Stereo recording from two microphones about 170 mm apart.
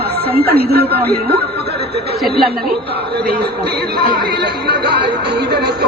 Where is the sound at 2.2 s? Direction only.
65° right (ahead or behind).